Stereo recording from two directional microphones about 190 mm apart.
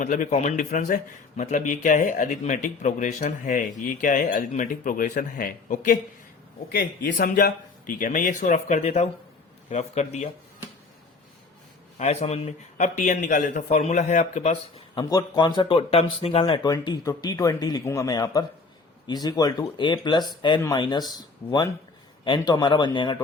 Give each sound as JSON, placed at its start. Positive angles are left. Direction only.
{"t": 0.0, "sound": "a man's voice", "side_deg": 40}
{"t": 6.7, "sound": "a man's voice", "side_deg": 55}
{"t": 11.9, "sound": "speech", "side_deg": 35}
{"t": 14.9, "sound": "speech", "side_deg": 20}